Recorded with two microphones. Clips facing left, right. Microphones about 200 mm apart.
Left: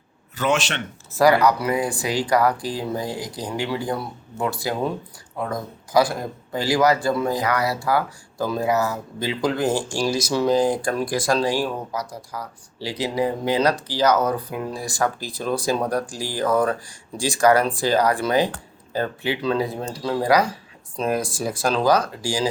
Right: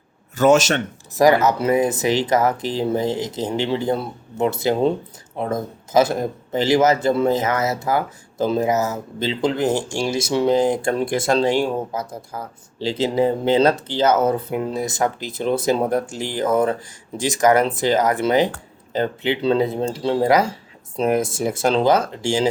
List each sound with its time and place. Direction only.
0.3 s a man's voice: 45° right (ahead or behind)
1.1 s a man's voice: 20° right (ahead or behind)